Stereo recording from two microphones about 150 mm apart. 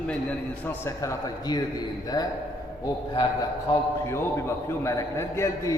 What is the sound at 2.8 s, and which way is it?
Speech, 25° left (ahead or behind).